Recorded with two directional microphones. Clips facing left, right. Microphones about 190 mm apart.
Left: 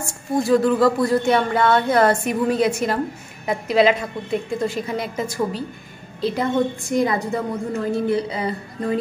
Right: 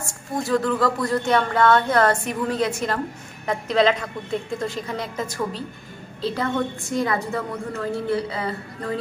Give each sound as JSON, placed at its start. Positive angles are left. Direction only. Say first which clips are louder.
{"t": 0.4, "sound": "a woman's voice", "louder": "left 5 dB", "side_deg": 10}